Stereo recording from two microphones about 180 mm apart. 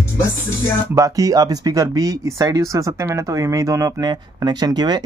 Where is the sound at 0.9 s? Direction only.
20° right (ahead or behind).